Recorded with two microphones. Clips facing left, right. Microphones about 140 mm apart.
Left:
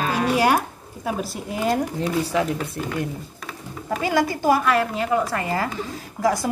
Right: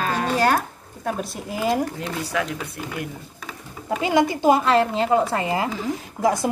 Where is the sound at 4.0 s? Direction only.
20° right (ahead or behind).